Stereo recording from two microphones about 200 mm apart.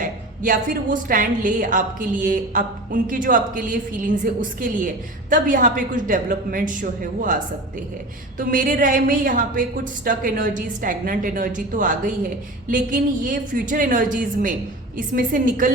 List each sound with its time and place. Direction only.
0.0 s a woman's voice: 40° right (ahead or behind)